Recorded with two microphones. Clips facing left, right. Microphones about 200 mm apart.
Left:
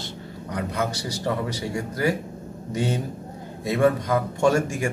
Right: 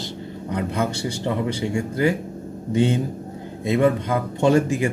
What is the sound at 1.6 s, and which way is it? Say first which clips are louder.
Speech: right 5 dB; 25° right (ahead or behind).